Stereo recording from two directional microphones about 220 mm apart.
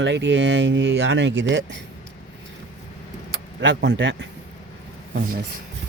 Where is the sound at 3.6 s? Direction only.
55° right (ahead or behind).